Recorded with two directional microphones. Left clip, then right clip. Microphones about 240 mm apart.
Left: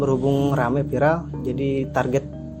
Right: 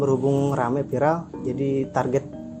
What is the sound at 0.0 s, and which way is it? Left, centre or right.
Speech, centre.